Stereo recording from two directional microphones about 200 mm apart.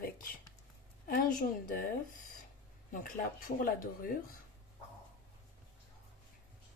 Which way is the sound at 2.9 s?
40° left (ahead or behind).